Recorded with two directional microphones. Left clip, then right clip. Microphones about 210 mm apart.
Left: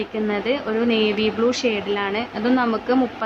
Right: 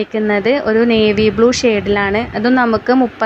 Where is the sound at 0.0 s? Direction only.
30° right (ahead or behind).